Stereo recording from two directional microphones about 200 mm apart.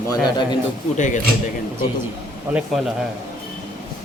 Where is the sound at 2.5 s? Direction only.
5° right (ahead or behind).